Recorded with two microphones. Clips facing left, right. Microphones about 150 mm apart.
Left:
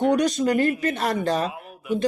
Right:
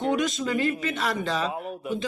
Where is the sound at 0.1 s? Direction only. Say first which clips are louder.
Left 5 dB; 40° left (ahead or behind).